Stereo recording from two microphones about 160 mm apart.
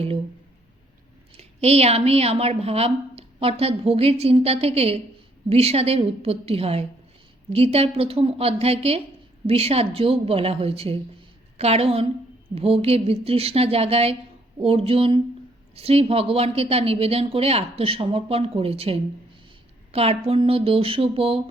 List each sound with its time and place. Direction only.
1.4 s a woman's voice: 40° right (ahead or behind)